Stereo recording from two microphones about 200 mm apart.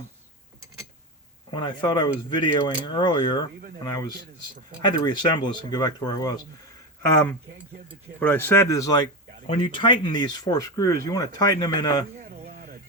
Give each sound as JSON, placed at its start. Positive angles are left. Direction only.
{"t": 1.5, "sound": "speech", "side_deg": 25}
{"t": 4.8, "sound": "speech", "side_deg": 20}
{"t": 12.5, "sound": "a sound", "side_deg": -45}